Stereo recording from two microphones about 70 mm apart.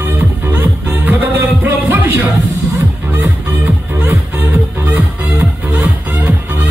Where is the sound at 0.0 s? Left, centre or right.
Right.